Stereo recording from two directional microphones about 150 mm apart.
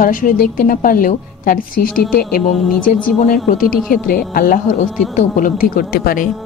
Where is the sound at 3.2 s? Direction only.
65° left (ahead or behind).